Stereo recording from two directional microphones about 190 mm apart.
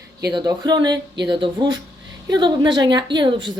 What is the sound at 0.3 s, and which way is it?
Speech, 20° right (ahead or behind).